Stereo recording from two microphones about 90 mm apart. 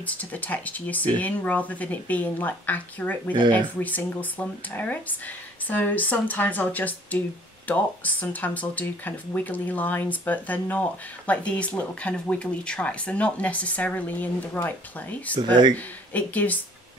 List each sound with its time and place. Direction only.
0.0 s speech: 15° left (ahead or behind)
3.3 s speech: 60° right (ahead or behind)
3.8 s speech: 20° left (ahead or behind)
15.3 s speech: 55° right (ahead or behind)
15.7 s speech: 15° left (ahead or behind)